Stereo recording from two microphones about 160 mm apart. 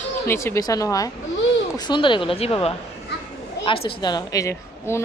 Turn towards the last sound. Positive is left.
turn(degrees=15)  # may be behind; listen again after turning